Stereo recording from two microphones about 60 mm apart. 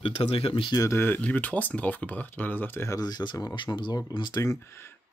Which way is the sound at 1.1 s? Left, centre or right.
Left.